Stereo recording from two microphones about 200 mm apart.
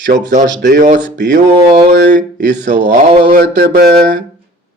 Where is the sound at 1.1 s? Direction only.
60° right (ahead or behind).